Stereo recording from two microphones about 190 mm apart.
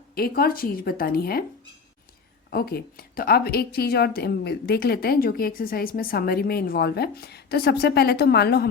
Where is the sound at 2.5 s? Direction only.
55° left (ahead or behind).